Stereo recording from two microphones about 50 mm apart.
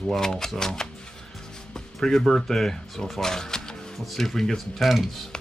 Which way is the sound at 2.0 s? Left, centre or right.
Centre.